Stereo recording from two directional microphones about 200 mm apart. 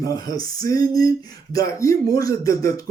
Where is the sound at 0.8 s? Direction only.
45° right (ahead or behind).